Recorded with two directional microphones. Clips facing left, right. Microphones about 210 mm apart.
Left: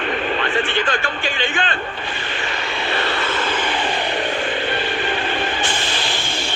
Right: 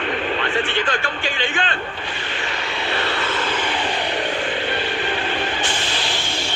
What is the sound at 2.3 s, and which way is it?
Vehicle, 50° left (ahead or behind).